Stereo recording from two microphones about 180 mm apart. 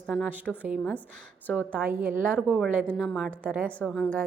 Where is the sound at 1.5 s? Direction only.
10° right (ahead or behind).